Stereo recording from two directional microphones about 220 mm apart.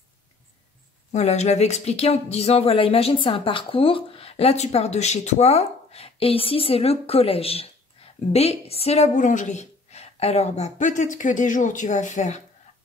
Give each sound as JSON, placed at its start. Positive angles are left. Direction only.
{"t": 1.1, "sound": "speech", "side_deg": 30}